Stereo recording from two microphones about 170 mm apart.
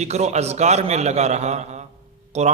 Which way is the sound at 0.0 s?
40° right (ahead or behind).